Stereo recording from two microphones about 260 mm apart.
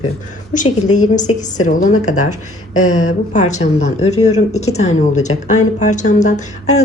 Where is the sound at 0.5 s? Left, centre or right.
Left.